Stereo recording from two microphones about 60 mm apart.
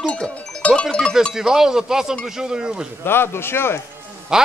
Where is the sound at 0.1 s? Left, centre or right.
Centre.